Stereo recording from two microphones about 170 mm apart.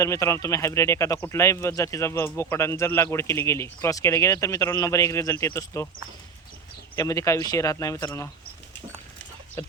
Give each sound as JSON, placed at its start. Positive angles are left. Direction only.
{"t": 0.0, "sound": "speech", "side_deg": 15}
{"t": 6.9, "sound": "speech", "side_deg": 20}